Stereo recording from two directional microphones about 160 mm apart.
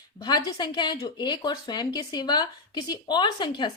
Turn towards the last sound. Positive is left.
turn(degrees=30)  # may be behind; listen again after turning